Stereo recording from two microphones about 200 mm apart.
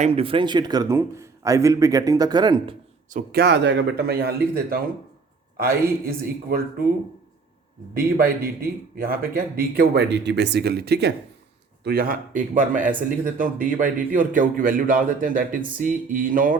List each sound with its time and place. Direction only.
0.0 s a man's voice: 30° right (ahead or behind)
3.1 s a man's voice: 45° right (ahead or behind)
6.1 s a man's voice: 50° right (ahead or behind)
7.9 s a man's voice: 45° right (ahead or behind)